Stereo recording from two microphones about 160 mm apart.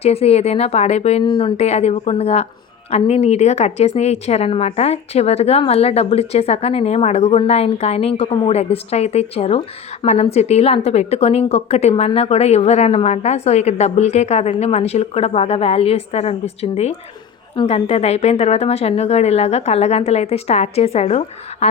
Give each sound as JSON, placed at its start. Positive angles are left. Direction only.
{"t": 0.0, "sound": "a woman's voice", "side_deg": 40}
{"t": 1.2, "sound": "a woman's voice", "side_deg": 30}